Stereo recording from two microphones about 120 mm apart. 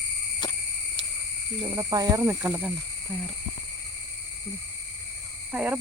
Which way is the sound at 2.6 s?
5° right (ahead or behind).